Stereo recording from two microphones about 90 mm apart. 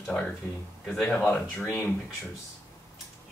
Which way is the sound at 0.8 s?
10° left (ahead or behind).